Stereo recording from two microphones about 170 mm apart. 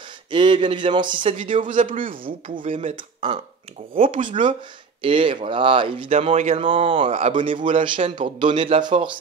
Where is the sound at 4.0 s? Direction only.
45° right (ahead or behind).